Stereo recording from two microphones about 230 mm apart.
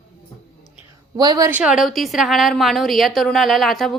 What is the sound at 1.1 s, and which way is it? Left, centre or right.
Speech, centre.